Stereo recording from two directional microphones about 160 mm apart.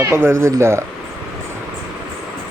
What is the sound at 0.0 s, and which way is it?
Speech, 15° right (ahead or behind).